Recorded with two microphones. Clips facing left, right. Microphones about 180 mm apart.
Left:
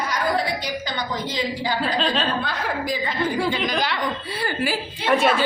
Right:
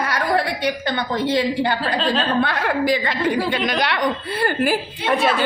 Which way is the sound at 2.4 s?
70° right (ahead or behind).